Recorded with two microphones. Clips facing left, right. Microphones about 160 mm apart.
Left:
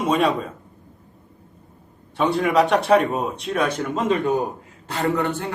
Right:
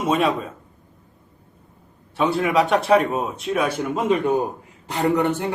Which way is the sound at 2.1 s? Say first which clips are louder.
Left 1 dB; centre (ahead or behind).